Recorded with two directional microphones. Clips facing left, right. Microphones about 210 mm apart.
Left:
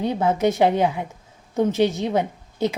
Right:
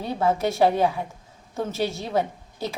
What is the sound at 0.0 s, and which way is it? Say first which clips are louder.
A woman's voice: left 3 dB; 20° left (ahead or behind).